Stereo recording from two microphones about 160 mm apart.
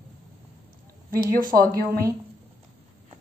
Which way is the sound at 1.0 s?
65° right (ahead or behind).